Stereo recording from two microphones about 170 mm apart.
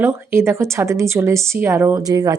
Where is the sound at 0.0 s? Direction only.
15° right (ahead or behind).